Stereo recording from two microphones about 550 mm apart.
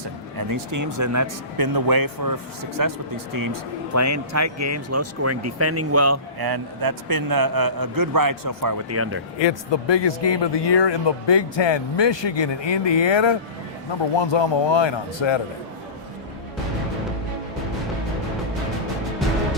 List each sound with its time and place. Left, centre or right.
0.3 s a man's voice: right
6.4 s a man's voice: right
9.4 s speech: left